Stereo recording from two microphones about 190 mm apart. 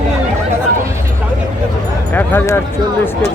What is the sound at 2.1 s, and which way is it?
Speech, 10° left (ahead or behind).